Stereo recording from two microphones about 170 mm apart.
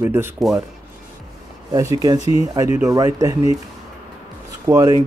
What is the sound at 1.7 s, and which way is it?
Speech, 20° right (ahead or behind).